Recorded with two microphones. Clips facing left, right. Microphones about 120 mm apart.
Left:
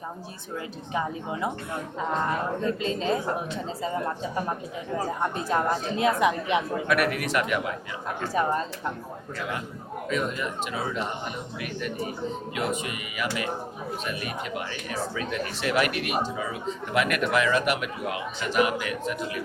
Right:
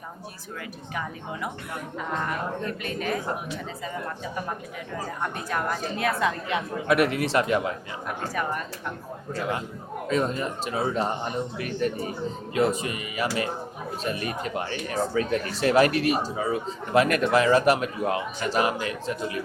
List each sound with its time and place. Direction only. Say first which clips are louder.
0.9 s a woman's voice: left 4 dB; 25° left (ahead or behind)
6.8 s speech: right 3 dB; 25° right (ahead or behind)
8.0 s a woman's voice: left 3 dB; 25° left (ahead or behind)
9.3 s speech: right 4 dB; 35° right (ahead or behind)